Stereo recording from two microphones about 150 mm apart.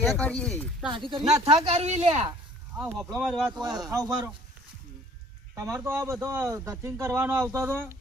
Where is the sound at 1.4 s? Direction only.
45° right (ahead or behind).